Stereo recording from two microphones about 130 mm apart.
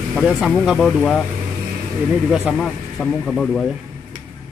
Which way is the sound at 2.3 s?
5° right (ahead or behind).